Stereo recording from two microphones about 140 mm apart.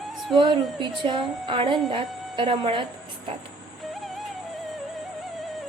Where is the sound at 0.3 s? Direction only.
35° right (ahead or behind).